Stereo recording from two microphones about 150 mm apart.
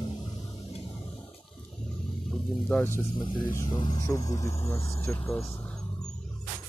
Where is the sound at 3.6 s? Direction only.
20° left (ahead or behind).